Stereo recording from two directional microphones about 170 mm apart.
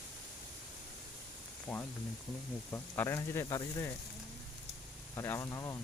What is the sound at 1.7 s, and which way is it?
Speech, 10° left (ahead or behind).